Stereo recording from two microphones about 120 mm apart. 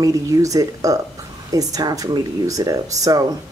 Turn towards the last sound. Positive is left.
turn(degrees=-30)  # may be behind; listen again after turning